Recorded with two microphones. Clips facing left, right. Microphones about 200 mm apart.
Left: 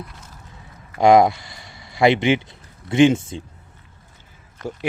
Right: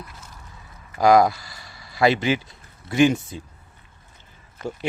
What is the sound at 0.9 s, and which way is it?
Speech, 25° left (ahead or behind).